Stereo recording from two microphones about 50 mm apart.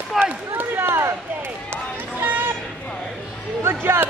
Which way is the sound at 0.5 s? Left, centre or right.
Right.